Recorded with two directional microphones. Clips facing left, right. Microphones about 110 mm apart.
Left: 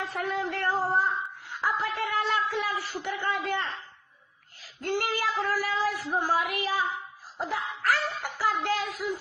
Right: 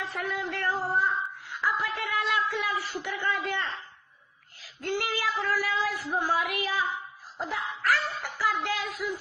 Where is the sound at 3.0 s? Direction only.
40° left (ahead or behind).